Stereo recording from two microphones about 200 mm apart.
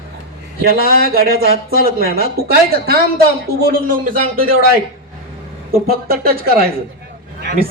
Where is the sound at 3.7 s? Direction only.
45° right (ahead or behind).